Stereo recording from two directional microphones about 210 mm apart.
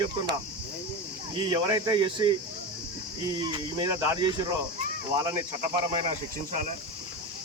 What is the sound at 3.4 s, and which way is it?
Speech, 20° right (ahead or behind).